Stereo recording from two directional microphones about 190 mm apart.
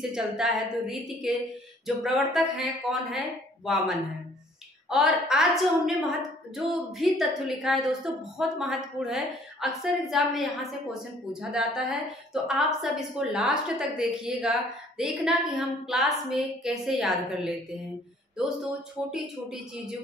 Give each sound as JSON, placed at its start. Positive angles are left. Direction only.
{"t": 0.0, "sound": "a woman's voice", "side_deg": -5}